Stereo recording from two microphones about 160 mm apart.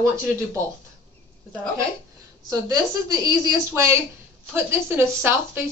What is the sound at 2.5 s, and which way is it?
A woman's voice, 25° right (ahead or behind).